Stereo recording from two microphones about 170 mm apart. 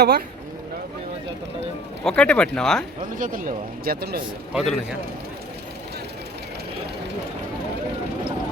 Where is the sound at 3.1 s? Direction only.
55° right (ahead or behind).